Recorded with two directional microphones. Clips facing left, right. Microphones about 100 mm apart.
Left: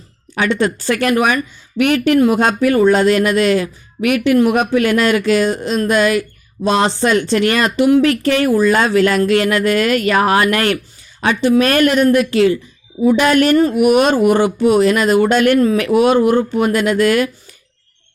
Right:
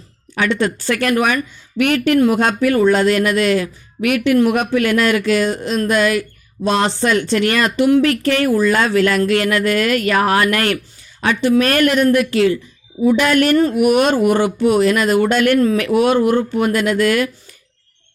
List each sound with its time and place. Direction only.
0.3 s speech: 20° left (ahead or behind)